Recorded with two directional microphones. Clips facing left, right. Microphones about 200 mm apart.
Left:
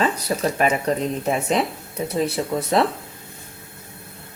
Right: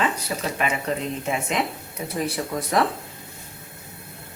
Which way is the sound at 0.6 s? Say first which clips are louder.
Left 4 dB; 40° left (ahead or behind).